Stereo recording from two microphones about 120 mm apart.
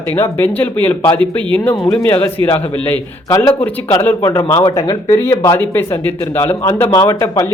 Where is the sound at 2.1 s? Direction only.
20° left (ahead or behind).